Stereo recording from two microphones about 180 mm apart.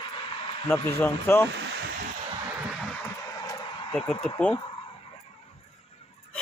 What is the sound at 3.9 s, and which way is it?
Speech, 5° left (ahead or behind).